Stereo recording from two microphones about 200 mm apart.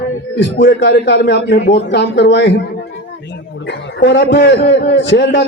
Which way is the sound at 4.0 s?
55° left (ahead or behind).